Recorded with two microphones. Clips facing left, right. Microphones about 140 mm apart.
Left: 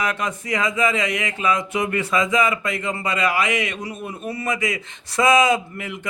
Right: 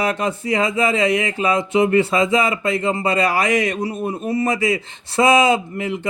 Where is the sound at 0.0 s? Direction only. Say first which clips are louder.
Right 4 dB; 30° right (ahead or behind).